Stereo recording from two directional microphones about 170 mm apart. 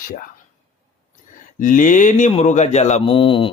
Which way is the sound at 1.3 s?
50° left (ahead or behind).